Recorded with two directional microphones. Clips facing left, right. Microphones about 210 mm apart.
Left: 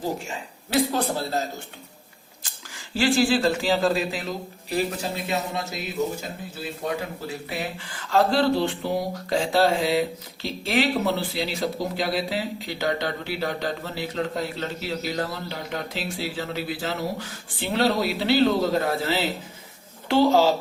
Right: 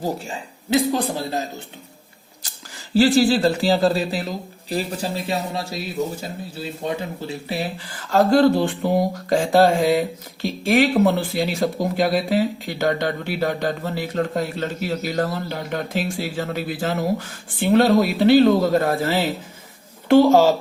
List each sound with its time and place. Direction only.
0.7 s speech: 15° right (ahead or behind)
2.9 s speech: 40° right (ahead or behind)